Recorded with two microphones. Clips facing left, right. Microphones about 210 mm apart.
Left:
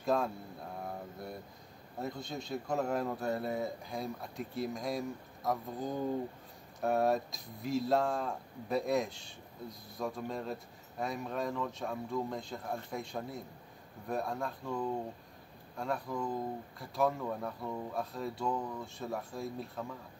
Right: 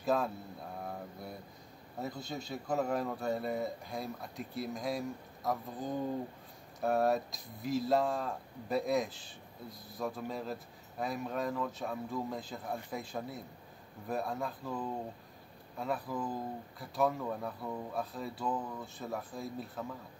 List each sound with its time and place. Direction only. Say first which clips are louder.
0.0 s mantra: even; centre (ahead or behind)
2.0 s speech: even; centre (ahead or behind)